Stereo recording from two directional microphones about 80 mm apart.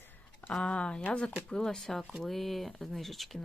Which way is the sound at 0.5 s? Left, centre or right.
Centre.